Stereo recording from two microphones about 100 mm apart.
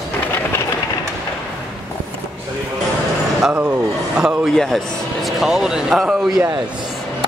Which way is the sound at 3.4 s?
10° right (ahead or behind).